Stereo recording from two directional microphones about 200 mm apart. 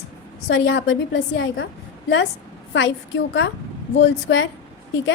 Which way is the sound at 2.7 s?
70° left (ahead or behind).